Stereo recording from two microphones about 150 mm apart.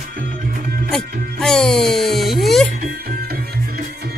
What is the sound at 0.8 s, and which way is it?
Music, 5° left (ahead or behind).